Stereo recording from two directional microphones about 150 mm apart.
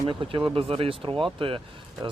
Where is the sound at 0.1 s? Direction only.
35° right (ahead or behind).